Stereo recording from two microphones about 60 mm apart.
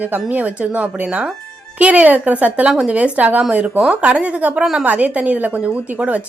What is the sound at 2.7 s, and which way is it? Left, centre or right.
Speech, centre.